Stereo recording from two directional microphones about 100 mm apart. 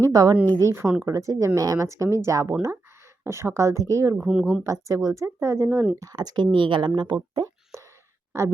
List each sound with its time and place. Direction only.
0.1 s speech: 40° right (ahead or behind)
0.6 s speech: 25° right (ahead or behind)
4.2 s speech: 10° right (ahead or behind)
4.6 s speech: 35° right (ahead or behind)
6.0 s speech: 40° right (ahead or behind)
7.7 s a sound: 30° right (ahead or behind)